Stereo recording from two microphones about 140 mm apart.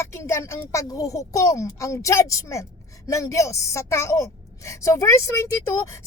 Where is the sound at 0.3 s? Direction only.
20° left (ahead or behind).